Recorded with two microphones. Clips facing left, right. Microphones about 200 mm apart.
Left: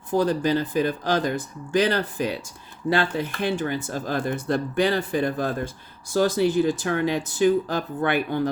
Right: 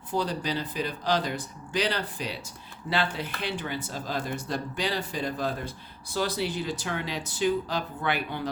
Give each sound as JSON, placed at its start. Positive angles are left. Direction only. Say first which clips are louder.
{"t": 0.1, "sound": "speech", "louder": "left 8 dB", "side_deg": 50}